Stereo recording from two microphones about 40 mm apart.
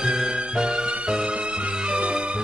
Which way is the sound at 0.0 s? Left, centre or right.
Right.